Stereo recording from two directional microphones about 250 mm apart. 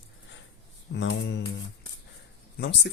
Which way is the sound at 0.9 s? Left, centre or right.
Left.